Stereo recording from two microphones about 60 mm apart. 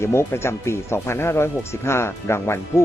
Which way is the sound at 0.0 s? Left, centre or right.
Left.